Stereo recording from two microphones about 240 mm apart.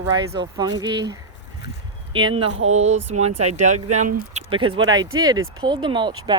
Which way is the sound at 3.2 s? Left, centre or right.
Right.